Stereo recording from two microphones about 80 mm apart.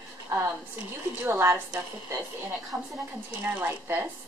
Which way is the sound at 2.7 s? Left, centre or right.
Right.